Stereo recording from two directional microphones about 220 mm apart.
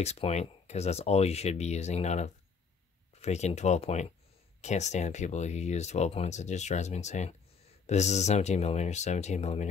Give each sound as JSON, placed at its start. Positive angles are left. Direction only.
{"t": 0.0, "sound": "speech", "side_deg": 30}